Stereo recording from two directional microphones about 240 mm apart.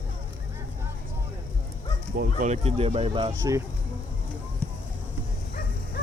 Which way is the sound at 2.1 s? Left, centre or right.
Right.